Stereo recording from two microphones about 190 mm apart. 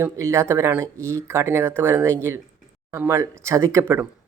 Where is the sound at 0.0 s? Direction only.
15° right (ahead or behind).